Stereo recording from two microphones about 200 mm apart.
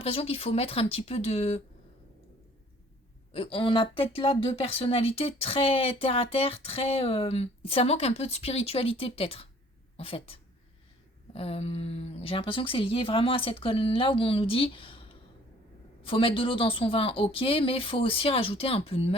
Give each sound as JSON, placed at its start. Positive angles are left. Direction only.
{"t": 0.0, "sound": "speech", "side_deg": 30}
{"t": 3.3, "sound": "speech", "side_deg": 25}
{"t": 16.0, "sound": "speech", "side_deg": 25}